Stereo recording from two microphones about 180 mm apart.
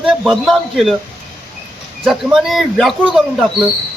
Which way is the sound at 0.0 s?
5° right (ahead or behind).